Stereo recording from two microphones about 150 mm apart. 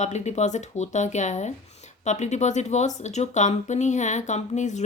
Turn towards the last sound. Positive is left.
turn(degrees=50)  # may be behind; listen again after turning